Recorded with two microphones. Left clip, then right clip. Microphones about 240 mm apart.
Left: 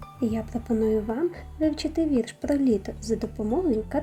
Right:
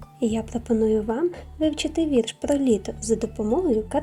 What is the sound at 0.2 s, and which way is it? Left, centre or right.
Speech, right.